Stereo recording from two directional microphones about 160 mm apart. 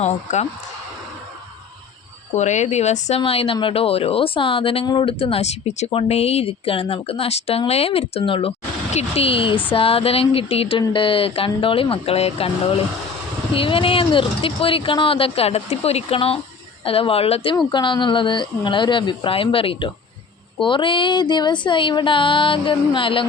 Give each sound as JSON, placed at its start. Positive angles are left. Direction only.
{"t": 0.0, "sound": "speech", "side_deg": 45}
{"t": 2.3, "sound": "a woman's voice", "side_deg": 45}
{"t": 13.5, "sound": "a woman's voice", "side_deg": 35}